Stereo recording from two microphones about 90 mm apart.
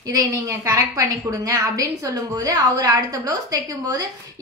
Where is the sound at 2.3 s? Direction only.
40° right (ahead or behind).